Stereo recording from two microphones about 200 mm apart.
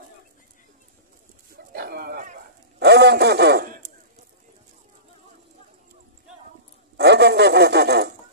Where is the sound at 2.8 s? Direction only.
55° right (ahead or behind).